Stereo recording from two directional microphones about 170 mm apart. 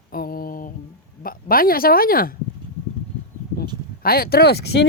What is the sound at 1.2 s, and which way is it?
A woman's voice, 60° left (ahead or behind).